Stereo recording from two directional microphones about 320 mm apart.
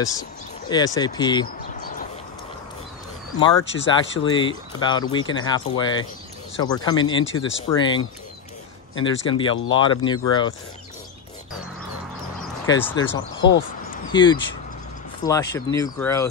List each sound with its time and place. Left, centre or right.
0.0 s speech: centre
3.3 s speech: centre
3.6 s speech: left
4.2 s speech: centre
7.2 s speech: left
7.8 s speech: centre
12.6 s speech: centre
13.4 s speech: left
14.1 s speech: centre